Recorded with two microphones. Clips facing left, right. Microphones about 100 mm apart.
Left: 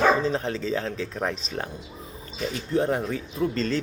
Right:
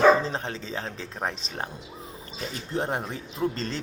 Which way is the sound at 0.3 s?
30° right (ahead or behind).